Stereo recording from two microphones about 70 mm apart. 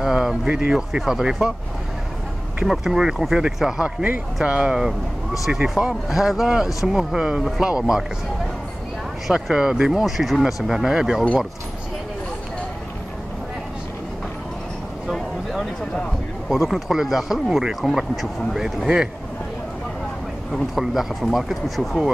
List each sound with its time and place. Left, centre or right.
0.0 s speech: centre
2.6 s speech: centre
4.5 s speech: centre
5.4 s speech: centre
9.3 s speech: centre
15.0 s a sound: centre
16.4 s speech: centre
20.7 s speech: centre